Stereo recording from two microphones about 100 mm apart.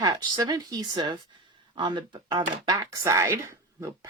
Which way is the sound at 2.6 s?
40° right (ahead or behind).